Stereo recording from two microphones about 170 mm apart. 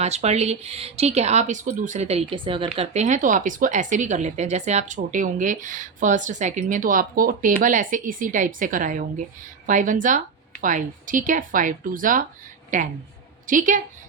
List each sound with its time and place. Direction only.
0.0 s speech: 40° right (ahead or behind)